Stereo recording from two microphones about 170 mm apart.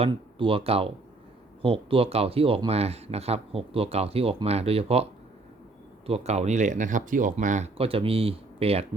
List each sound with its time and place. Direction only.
0.0 s speech: 30° right (ahead or behind)
6.1 s speech: 40° right (ahead or behind)